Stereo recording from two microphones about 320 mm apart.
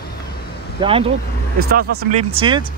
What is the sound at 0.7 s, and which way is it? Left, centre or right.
Speech, centre.